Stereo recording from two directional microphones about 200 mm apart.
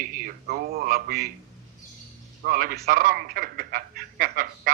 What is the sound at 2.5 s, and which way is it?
Speech, 45° right (ahead or behind).